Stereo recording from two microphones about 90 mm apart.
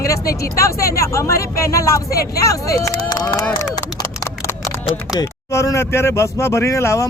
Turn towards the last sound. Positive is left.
turn(degrees=35)  # may be behind; listen again after turning